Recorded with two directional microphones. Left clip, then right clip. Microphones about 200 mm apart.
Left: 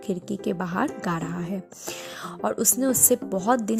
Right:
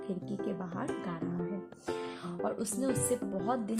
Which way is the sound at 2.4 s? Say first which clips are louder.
Left 10 dB; 45° left (ahead or behind).